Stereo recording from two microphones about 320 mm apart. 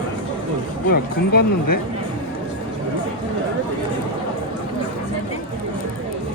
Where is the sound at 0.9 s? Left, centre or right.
Left.